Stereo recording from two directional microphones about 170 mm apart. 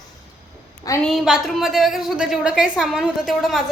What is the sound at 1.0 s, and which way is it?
A woman's voice, centre (ahead or behind).